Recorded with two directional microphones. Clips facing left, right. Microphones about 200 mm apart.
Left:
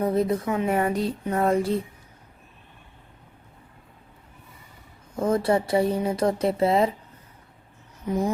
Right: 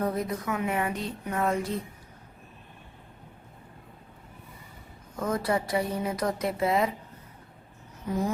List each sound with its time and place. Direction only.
0.0 s speech: 25° left (ahead or behind)
0.7 s speech: 40° left (ahead or behind)
5.1 s speech: 30° left (ahead or behind)
8.0 s a sound: 20° left (ahead or behind)